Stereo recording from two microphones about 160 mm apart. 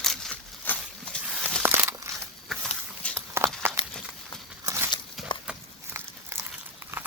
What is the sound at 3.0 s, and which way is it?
Walk, 5° left (ahead or behind).